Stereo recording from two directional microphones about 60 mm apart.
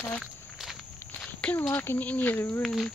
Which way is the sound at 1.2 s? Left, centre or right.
Centre.